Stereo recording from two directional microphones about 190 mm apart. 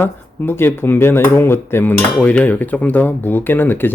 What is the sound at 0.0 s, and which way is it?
Speech, 10° left (ahead or behind).